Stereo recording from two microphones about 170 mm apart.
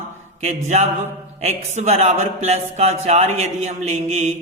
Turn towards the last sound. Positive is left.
turn(degrees=-40)  # may be behind; listen again after turning